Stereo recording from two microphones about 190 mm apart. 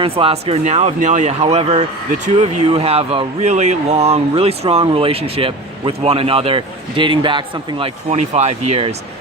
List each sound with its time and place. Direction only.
0.0 s speech: 30° right (ahead or behind)